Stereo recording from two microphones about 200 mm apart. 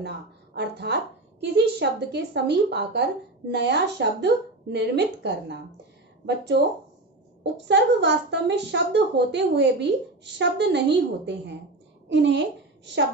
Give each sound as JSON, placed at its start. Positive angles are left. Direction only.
{"t": 0.6, "sound": "a woman's voice", "side_deg": -55}